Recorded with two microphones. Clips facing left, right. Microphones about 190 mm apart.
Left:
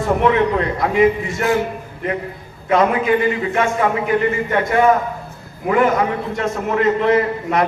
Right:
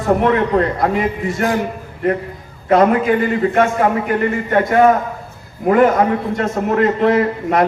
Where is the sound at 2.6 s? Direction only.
45° right (ahead or behind).